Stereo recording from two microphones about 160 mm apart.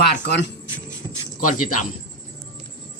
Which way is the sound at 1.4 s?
55° left (ahead or behind).